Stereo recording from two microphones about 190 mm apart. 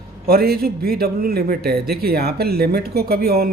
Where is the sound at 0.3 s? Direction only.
55° right (ahead or behind).